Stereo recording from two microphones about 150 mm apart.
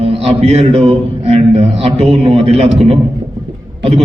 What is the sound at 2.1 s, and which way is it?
Speech, 45° right (ahead or behind).